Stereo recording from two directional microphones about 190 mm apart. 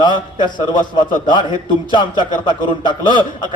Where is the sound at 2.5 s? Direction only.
25° left (ahead or behind).